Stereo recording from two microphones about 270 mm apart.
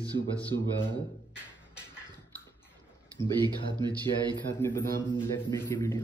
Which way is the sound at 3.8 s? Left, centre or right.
Centre.